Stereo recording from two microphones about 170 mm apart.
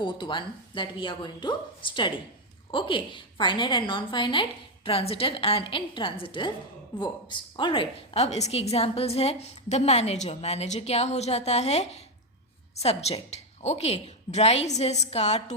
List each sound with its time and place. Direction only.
0.0 s a woman's voice: 30° left (ahead or behind)